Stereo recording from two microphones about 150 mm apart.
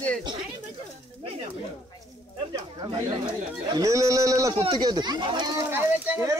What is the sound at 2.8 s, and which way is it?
Speech, 30° right (ahead or behind).